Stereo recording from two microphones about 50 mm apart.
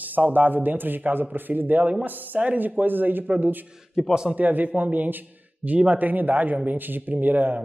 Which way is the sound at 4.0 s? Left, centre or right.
Centre.